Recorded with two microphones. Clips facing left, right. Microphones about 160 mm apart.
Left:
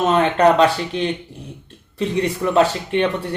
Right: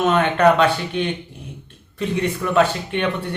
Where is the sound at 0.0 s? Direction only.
35° left (ahead or behind).